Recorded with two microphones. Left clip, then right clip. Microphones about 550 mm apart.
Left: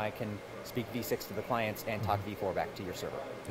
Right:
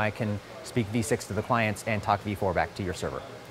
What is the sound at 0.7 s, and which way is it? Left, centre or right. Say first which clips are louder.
Speech: right 7 dB; right.